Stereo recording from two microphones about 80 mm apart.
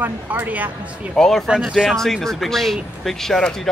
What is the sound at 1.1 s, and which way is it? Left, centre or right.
Speech, centre.